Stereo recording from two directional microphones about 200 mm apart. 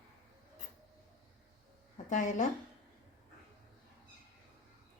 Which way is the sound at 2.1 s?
40° left (ahead or behind).